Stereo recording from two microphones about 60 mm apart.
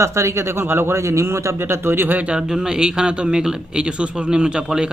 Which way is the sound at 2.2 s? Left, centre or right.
Centre.